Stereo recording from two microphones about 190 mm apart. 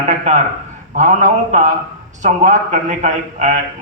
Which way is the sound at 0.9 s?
40° right (ahead or behind).